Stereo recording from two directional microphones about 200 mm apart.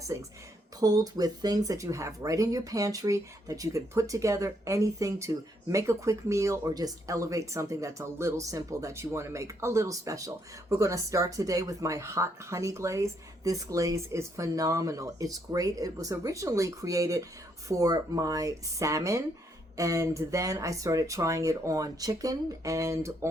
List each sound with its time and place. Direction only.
0.1 s speech: 15° right (ahead or behind)